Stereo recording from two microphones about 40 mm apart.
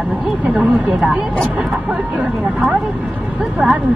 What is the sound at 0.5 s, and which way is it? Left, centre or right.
Speech, centre.